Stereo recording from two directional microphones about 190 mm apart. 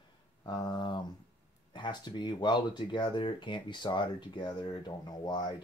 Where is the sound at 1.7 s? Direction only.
25° left (ahead or behind).